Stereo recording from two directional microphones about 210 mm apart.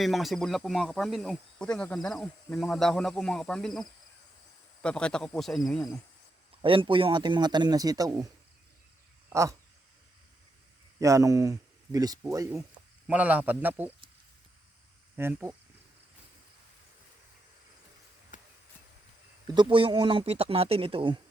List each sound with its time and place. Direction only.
0.0 s speech: centre (ahead or behind)
6.6 s speech: 25° right (ahead or behind)
9.3 s speech: 15° right (ahead or behind)
11.0 s speech: 15° right (ahead or behind)
15.1 s speech: 10° right (ahead or behind)
18.3 s basketball bounce: 35° left (ahead or behind)
19.5 s speech: 20° right (ahead or behind)